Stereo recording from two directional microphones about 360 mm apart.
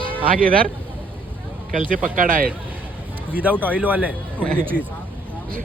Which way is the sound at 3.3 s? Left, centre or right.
Centre.